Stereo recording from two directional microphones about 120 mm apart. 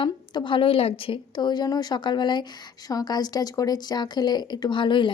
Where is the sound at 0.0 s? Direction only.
45° left (ahead or behind).